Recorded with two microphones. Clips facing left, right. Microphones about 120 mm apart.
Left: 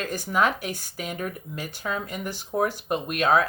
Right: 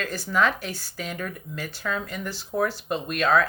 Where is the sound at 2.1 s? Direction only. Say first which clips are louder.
Left 1 dB; 45° left (ahead or behind).